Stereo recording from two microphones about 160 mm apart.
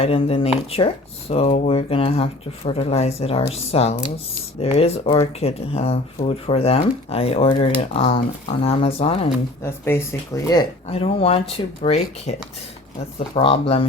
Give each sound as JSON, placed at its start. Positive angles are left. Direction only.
{"t": 0.0, "sound": "speech", "side_deg": 35}
{"t": 9.6, "sound": "speech", "side_deg": 15}
{"t": 10.9, "sound": "speech", "side_deg": 35}